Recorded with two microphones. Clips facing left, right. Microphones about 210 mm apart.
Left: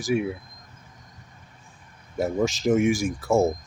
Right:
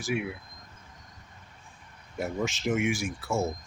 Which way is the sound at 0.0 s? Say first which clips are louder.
Left 6 dB; 40° left (ahead or behind).